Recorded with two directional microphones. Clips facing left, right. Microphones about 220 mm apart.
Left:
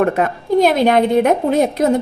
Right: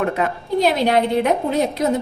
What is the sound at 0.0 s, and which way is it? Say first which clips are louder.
A woman's voice: left 5 dB; 50° left (ahead or behind).